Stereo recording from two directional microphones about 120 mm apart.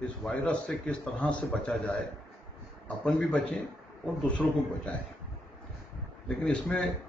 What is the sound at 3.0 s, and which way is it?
A man's voice, 10° left (ahead or behind).